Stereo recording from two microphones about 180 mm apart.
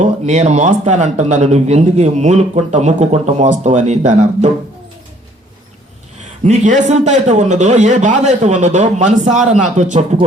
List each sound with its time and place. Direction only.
0.0 s speech: 40° right (ahead or behind)
6.4 s speech: 40° right (ahead or behind)